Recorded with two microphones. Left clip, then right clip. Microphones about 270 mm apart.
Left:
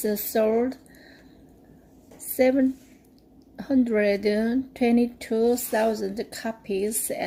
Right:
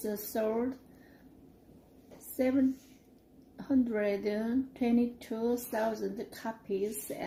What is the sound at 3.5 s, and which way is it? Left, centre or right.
Speech, left.